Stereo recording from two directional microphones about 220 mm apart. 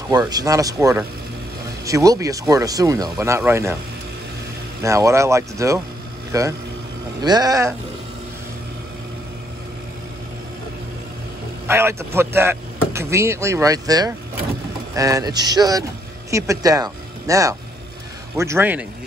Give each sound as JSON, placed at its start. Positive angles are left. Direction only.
{"t": 0.1, "sound": "speech", "side_deg": -15}
{"t": 4.8, "sound": "speech", "side_deg": -15}
{"t": 11.6, "sound": "speech", "side_deg": -10}